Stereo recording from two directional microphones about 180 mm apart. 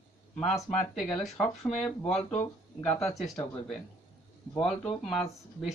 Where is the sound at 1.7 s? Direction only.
35° left (ahead or behind).